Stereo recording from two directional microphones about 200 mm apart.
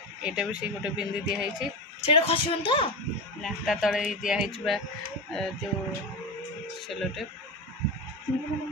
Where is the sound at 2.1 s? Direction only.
30° left (ahead or behind).